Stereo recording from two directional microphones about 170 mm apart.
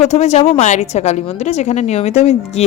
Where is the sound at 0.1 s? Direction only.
40° left (ahead or behind).